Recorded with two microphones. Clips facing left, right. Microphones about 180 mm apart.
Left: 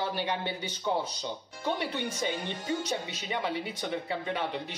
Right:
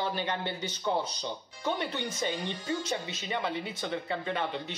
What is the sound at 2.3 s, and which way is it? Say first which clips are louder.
Speech: even; 50° left (ahead or behind).